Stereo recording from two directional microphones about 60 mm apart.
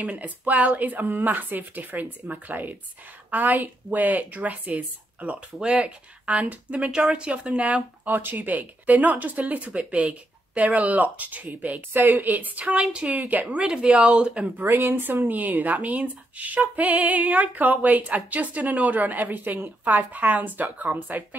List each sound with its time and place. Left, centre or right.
0.0 s speech: right
6.8 s speech: centre; by 13.7 s right
13.7 s speech: centre
14.7 s speech: right